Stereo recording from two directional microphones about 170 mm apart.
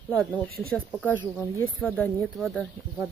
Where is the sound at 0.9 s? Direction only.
10° left (ahead or behind).